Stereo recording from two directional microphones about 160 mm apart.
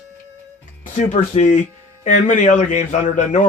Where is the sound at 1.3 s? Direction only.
45° left (ahead or behind).